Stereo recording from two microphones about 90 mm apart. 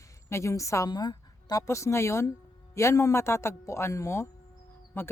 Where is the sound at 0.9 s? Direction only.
50° left (ahead or behind).